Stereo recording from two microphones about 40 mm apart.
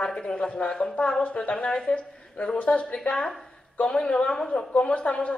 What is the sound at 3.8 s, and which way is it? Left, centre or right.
Speech, left.